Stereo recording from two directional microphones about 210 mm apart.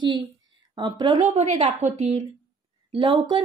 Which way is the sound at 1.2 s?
35° right (ahead or behind).